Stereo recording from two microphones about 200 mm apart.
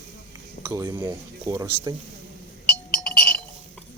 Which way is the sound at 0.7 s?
15° right (ahead or behind).